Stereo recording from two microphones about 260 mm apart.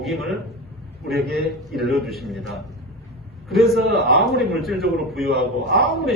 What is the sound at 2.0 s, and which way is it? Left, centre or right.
A man's voice, centre.